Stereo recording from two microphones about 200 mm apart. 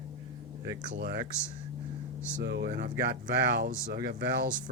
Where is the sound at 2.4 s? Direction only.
60° right (ahead or behind).